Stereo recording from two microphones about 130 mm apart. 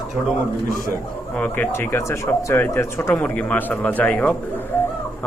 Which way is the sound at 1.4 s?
10° left (ahead or behind).